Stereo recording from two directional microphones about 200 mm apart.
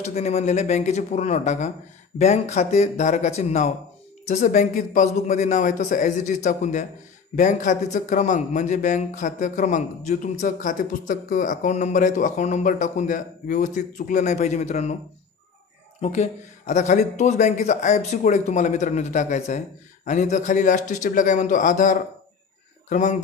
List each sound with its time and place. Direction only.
0.0 s speech: 35° left (ahead or behind)
16.0 s speech: 35° left (ahead or behind)